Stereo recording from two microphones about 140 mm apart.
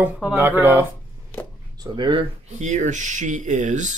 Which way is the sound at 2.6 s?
60° right (ahead or behind).